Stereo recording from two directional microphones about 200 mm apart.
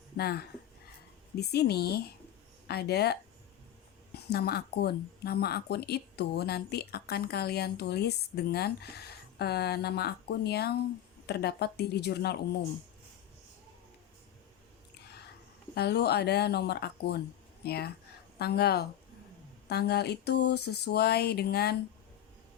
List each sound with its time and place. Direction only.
0.2 s speech: 50° left (ahead or behind)
15.7 s speech: 55° left (ahead or behind)